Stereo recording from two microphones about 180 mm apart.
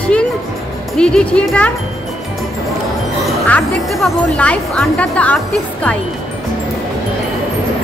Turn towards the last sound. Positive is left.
turn(degrees=5)  # may be behind; listen again after turning